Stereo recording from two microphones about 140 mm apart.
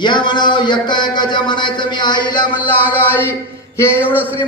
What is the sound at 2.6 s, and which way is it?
Music, 15° right (ahead or behind).